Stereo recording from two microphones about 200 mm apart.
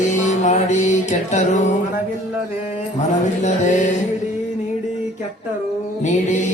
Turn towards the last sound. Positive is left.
turn(degrees=35)  # may be behind; listen again after turning